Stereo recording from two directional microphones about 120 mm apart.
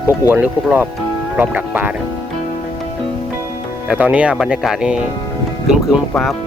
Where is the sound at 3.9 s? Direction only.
10° right (ahead or behind).